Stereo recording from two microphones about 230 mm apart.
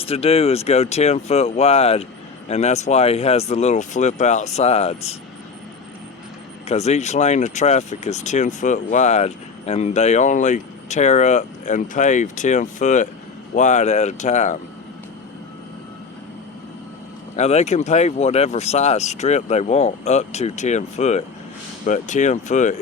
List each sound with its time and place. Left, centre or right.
0.0 s speech: left
6.7 s speech: left
17.3 s speech: left